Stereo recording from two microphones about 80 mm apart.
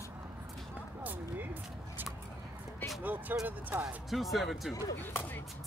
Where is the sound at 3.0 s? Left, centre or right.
Right.